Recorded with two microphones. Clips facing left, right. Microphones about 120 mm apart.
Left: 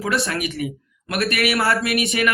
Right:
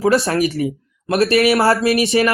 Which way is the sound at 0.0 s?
30° right (ahead or behind).